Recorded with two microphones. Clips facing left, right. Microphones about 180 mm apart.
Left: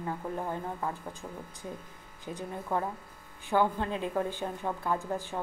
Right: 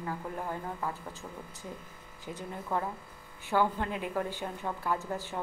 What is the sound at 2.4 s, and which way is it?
Speech, 15° left (ahead or behind).